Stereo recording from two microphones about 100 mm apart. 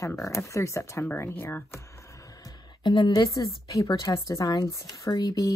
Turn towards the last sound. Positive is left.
turn(degrees=40)  # may be behind; listen again after turning